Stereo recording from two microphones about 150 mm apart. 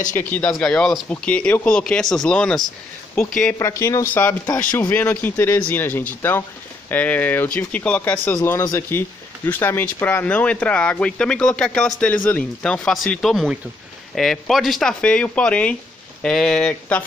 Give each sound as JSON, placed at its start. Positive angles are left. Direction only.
{"t": 0.2, "sound": "speech", "side_deg": 10}
{"t": 3.5, "sound": "speech", "side_deg": 20}
{"t": 8.4, "sound": "speech", "side_deg": 20}